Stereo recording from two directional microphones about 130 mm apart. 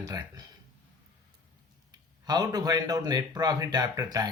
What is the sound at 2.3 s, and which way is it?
Speech, 30° right (ahead or behind).